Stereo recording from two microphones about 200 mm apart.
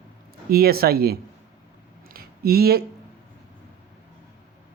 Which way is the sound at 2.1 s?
50° right (ahead or behind).